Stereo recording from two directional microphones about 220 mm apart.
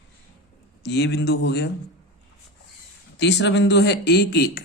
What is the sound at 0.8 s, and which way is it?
Speech, 50° left (ahead or behind).